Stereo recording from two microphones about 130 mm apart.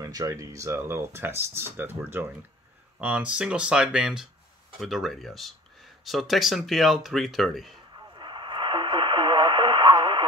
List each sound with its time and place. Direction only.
0.0 s speech: 25° right (ahead or behind); by 7.8 s centre (ahead or behind)
7.9 s radio: 35° right (ahead or behind)